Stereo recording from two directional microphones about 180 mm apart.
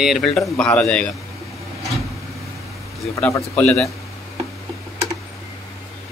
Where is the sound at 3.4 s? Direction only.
5° left (ahead or behind).